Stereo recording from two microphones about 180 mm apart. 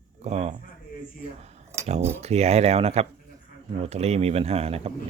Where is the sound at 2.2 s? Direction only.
35° right (ahead or behind).